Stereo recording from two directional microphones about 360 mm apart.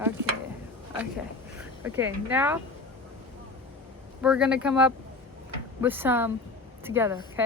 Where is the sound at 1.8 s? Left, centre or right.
Centre.